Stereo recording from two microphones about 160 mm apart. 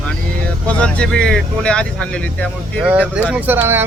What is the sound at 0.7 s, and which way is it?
Speech, 5° left (ahead or behind).